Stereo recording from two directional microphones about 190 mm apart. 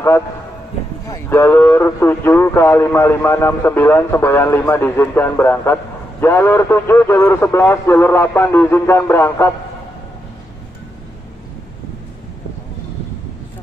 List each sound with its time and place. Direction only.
1.1 s speech: 15° left (ahead or behind)